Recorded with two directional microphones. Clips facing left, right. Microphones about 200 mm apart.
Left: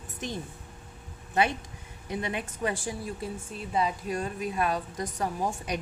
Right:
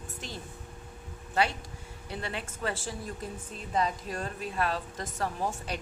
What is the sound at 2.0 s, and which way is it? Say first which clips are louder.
A woman's voice: left 5 dB; 15° left (ahead or behind).